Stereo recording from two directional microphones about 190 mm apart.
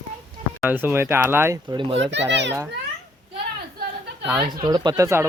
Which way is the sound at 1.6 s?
25° right (ahead or behind).